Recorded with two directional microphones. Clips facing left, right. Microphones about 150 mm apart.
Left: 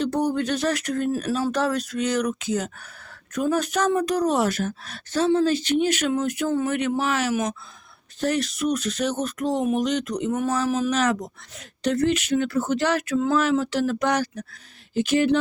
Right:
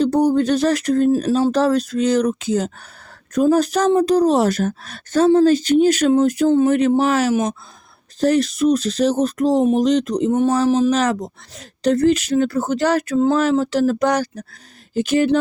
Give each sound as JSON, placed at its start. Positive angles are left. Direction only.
{"t": 0.0, "sound": "speech", "side_deg": -35}